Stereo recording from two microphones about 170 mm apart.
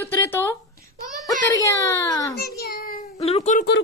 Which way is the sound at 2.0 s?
20° left (ahead or behind).